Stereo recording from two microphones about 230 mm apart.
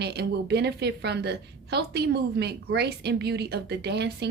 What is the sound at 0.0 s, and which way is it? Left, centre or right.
A woman's voice, right.